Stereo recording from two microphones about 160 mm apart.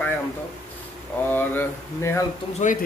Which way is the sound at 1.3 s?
10° left (ahead or behind).